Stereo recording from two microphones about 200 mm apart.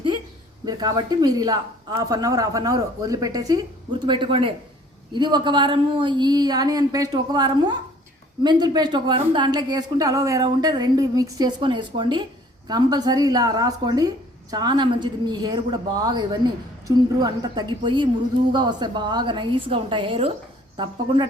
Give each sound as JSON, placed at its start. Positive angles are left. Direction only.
{"t": 0.6, "sound": "a woman's voice", "side_deg": -20}